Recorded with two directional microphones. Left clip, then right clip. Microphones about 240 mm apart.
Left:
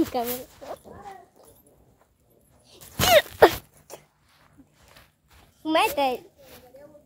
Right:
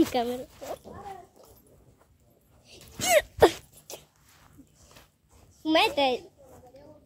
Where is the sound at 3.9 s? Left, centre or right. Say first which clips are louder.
Even; centre.